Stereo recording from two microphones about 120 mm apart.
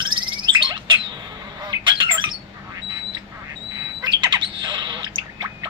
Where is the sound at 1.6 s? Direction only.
40° right (ahead or behind).